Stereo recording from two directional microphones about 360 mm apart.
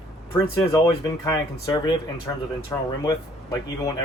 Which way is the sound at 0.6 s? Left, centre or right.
Centre.